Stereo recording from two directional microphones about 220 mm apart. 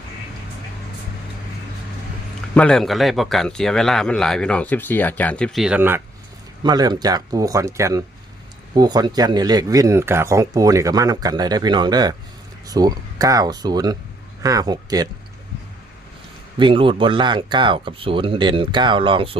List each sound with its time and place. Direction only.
2.6 s speech: 5° left (ahead or behind)
6.6 s speech: 20° right (ahead or behind)
16.6 s speech: 20° right (ahead or behind)